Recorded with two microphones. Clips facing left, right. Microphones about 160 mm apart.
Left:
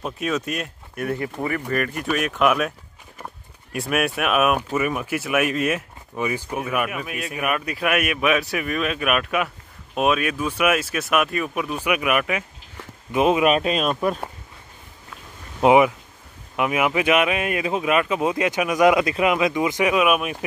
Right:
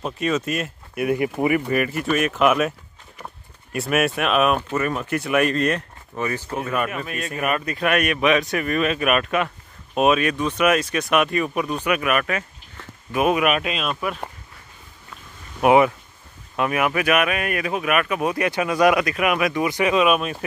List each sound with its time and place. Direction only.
0.0 s speech: centre (ahead or behind)
3.7 s speech: centre (ahead or behind)
13.2 s speech: 25° left (ahead or behind)
15.6 s speech: 15° left (ahead or behind)